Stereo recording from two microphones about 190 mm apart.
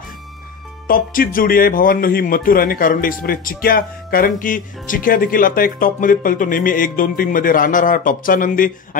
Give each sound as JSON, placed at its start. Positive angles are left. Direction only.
{"t": 0.8, "sound": "a man's voice", "side_deg": 50}